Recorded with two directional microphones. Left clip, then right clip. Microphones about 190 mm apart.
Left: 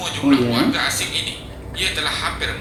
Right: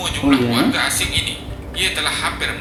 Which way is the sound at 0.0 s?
15° right (ahead or behind).